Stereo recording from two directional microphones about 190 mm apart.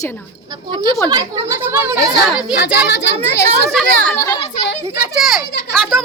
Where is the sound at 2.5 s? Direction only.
65° left (ahead or behind).